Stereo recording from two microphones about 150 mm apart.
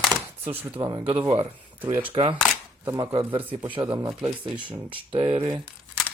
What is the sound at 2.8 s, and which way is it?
Speech, 25° right (ahead or behind).